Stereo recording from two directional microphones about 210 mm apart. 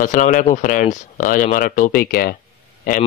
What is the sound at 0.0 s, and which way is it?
Speech, 40° left (ahead or behind).